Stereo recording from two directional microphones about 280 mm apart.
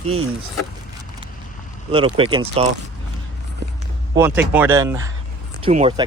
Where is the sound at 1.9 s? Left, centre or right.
Centre.